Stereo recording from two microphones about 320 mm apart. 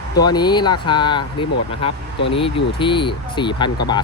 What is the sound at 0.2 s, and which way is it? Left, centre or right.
Speech, centre.